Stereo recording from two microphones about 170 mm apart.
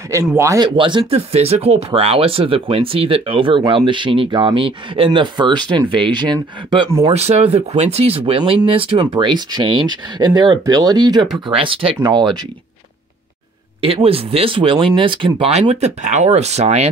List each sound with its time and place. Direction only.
0.1 s speech: 15° right (ahead or behind)
0.7 s speech: 30° right (ahead or behind)
7.1 s speech: 40° right (ahead or behind)
13.7 s speech: 35° right (ahead or behind)